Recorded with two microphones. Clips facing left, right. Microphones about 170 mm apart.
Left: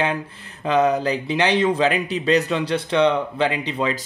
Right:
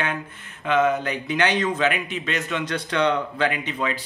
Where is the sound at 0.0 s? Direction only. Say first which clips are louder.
Left 5 dB; 35° left (ahead or behind).